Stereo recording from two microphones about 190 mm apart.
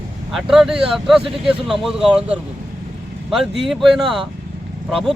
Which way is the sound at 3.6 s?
Centre (ahead or behind).